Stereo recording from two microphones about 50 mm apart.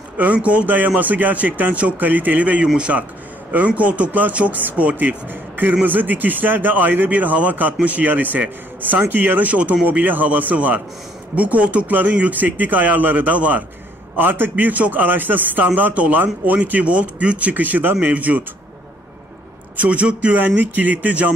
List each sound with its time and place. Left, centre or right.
0.2 s a man's voice: right
2.6 s a man's voice: centre
3.5 s speech: right
5.3 s a man's voice: right
14.1 s a man's voice: right
19.8 s speech: right